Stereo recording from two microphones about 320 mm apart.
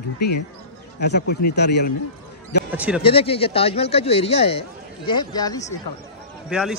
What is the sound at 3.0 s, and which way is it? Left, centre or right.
Speech, centre.